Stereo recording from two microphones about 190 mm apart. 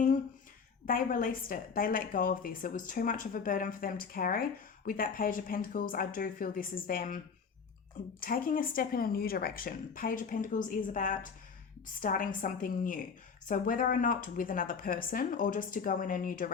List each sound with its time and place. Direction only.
0.9 s a woman's voice: 45° left (ahead or behind)
8.2 s a woman's voice: 45° left (ahead or behind)